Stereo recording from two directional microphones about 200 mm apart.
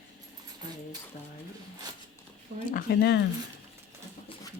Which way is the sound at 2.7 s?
45° left (ahead or behind).